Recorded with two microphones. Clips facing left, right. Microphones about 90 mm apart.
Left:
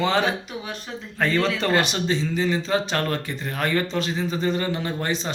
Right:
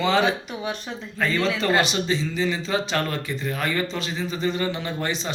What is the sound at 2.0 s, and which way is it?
A man's voice, 40° left (ahead or behind).